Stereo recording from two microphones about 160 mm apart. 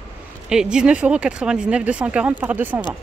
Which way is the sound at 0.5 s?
5° right (ahead or behind).